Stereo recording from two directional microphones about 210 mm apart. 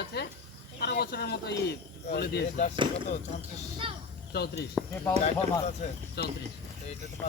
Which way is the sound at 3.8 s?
25° right (ahead or behind).